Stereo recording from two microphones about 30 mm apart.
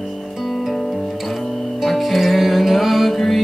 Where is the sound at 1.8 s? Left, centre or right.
Centre.